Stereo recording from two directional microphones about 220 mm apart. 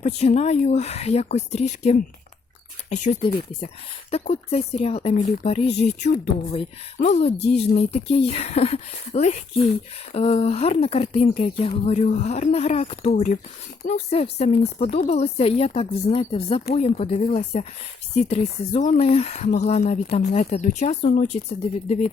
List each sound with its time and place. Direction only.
0.0 s speech: 30° left (ahead or behind)